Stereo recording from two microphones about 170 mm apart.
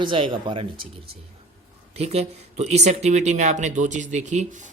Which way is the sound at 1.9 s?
40° right (ahead or behind).